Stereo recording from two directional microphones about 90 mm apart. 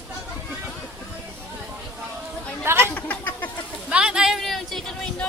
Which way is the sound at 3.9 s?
10° right (ahead or behind).